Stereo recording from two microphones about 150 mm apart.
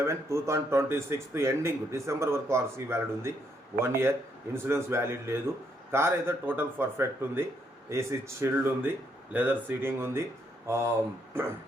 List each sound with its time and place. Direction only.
0.0 s speech: 20° right (ahead or behind)